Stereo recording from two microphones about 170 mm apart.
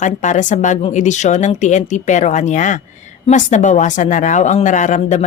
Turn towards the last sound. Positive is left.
turn(degrees=45)  # may be behind; listen again after turning